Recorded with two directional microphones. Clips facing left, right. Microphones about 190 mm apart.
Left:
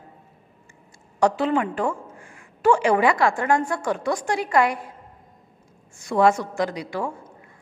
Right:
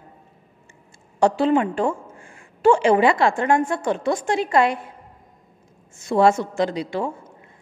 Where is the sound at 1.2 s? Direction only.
30° right (ahead or behind).